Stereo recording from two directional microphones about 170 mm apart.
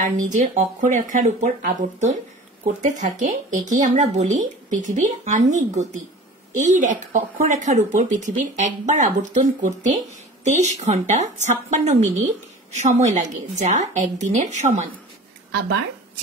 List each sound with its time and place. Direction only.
0.0 s speech: 45° right (ahead or behind)